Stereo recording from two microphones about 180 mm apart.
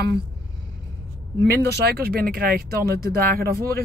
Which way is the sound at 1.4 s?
65° right (ahead or behind).